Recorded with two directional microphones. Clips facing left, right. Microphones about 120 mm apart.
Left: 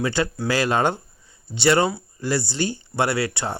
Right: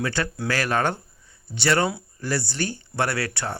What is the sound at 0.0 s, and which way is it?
Speech, 15° left (ahead or behind).